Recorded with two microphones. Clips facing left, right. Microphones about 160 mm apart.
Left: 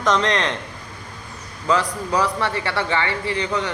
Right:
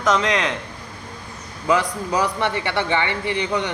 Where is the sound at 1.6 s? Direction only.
15° right (ahead or behind).